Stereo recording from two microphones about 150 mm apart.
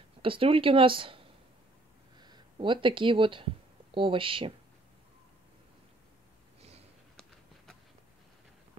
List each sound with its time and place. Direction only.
0.2 s speech: 35° right (ahead or behind)